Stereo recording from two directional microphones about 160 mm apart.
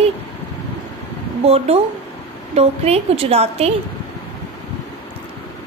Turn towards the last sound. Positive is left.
turn(degrees=-40)  # may be behind; listen again after turning